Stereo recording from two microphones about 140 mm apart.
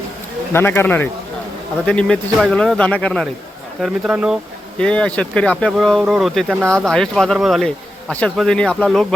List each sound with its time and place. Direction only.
0.5 s speech: 15° left (ahead or behind); by 4.4 s 10° right (ahead or behind)
4.8 s speech: 5° left (ahead or behind)